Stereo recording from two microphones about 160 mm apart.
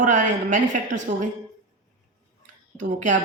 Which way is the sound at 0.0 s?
50° right (ahead or behind).